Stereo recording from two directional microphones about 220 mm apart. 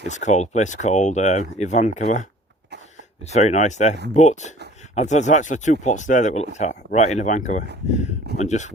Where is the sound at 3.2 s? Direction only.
30° left (ahead or behind).